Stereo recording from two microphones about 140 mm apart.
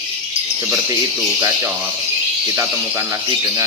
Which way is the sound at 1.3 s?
20° right (ahead or behind).